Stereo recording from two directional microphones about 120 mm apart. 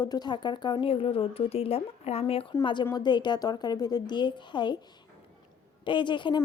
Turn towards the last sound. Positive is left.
turn(degrees=40)  # may be behind; listen again after turning